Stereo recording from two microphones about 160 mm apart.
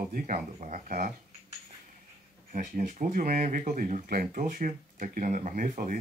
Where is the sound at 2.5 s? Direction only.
55° right (ahead or behind).